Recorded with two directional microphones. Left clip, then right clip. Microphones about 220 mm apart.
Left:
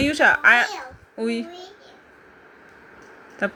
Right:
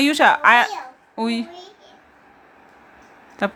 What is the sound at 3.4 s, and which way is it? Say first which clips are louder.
Speech: right 2 dB; 20° right (ahead or behind).